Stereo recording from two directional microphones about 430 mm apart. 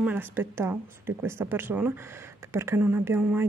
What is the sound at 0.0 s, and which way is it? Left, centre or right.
Speech, centre.